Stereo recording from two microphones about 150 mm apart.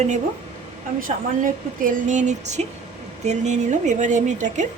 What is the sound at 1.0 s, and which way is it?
A woman's voice, 65° right (ahead or behind).